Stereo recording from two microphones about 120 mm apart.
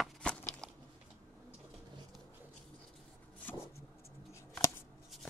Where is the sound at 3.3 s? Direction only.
20° left (ahead or behind).